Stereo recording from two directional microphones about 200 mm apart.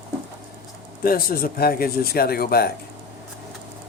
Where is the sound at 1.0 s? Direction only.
50° left (ahead or behind).